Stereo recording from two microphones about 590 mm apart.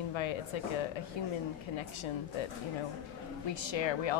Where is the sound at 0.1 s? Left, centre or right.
Left.